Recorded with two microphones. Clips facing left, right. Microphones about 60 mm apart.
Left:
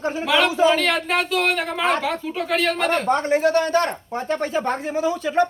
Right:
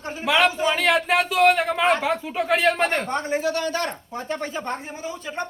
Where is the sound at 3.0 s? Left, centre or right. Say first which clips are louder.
Left 6 dB; left.